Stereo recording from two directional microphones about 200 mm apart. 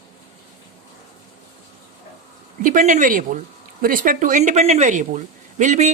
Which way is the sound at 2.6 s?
40° right (ahead or behind).